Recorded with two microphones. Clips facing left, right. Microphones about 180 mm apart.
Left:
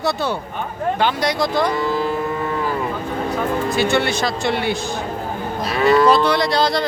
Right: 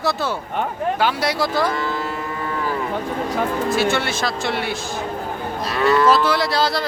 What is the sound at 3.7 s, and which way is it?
Speech, centre (ahead or behind).